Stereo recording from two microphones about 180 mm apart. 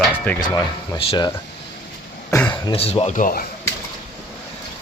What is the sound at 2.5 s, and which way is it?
Speech, 30° left (ahead or behind).